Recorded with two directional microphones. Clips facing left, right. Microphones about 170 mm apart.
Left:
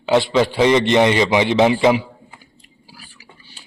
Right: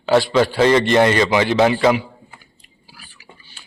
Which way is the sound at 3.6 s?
35° left (ahead or behind).